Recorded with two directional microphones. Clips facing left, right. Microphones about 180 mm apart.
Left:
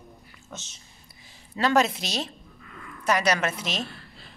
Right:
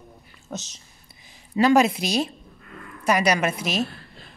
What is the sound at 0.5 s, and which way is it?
Speech, 40° right (ahead or behind).